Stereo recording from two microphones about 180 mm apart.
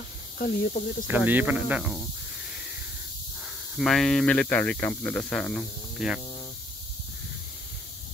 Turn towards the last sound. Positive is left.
turn(degrees=-5)  # may be behind; listen again after turning